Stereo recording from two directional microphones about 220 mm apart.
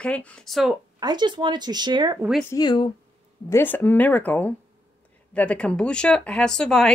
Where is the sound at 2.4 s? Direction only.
15° left (ahead or behind).